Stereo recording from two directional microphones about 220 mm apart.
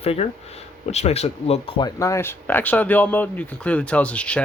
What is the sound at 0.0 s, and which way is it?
Speech, 30° left (ahead or behind).